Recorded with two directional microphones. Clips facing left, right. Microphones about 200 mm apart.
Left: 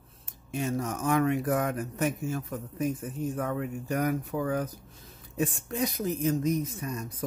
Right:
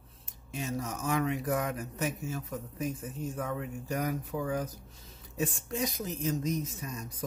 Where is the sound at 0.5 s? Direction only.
55° left (ahead or behind).